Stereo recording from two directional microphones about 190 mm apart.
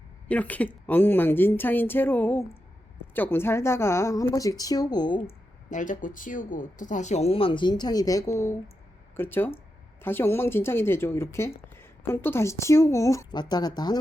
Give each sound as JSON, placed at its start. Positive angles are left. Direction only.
{"t": 0.3, "sound": "a woman's voice", "side_deg": 10}
{"t": 5.7, "sound": "a woman's voice", "side_deg": 45}